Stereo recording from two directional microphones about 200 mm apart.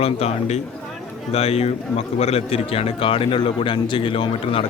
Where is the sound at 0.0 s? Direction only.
30° left (ahead or behind).